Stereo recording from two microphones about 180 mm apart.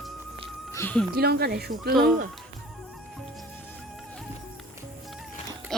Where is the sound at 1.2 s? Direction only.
60° right (ahead or behind).